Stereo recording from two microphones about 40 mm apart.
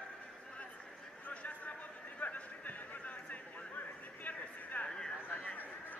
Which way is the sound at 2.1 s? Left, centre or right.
Left.